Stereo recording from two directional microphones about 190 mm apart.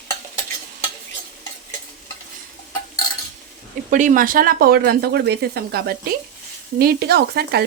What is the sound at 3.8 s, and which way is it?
Speech, 45° right (ahead or behind).